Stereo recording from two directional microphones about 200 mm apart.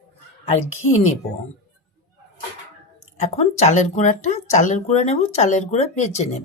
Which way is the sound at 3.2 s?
35° left (ahead or behind).